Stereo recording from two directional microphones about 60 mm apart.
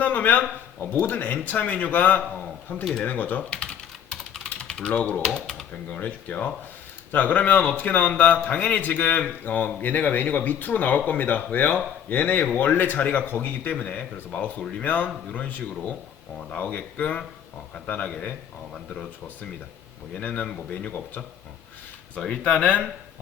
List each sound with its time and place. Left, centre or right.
0.0 s a man's voice: left
3.0 s typing: left
5.2 s speech: centre
5.7 s speech: left
20.1 s speech: left
22.3 s speech: centre